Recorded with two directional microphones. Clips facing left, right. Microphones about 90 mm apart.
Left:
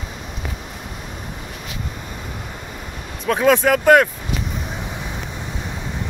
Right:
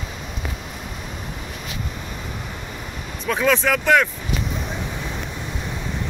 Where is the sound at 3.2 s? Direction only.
50° left (ahead or behind).